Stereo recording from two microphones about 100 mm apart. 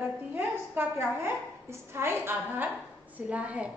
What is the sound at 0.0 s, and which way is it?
A woman's voice, 20° right (ahead or behind).